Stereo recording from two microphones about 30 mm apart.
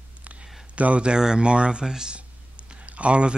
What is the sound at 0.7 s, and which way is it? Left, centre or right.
Speech, right.